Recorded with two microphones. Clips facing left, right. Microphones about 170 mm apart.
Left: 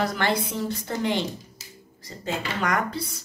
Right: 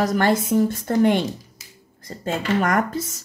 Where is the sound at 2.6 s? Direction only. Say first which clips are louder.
Right 4 dB; 45° right (ahead or behind).